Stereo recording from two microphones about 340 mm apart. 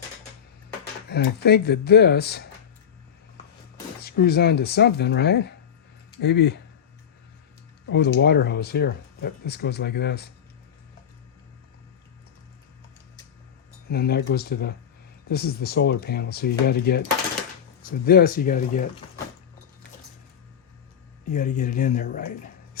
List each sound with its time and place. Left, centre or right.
1.1 s speech: left
4.0 s speech: left
7.9 s speech: left
13.9 s speech: left
18.0 s speech: left
21.2 s speech: left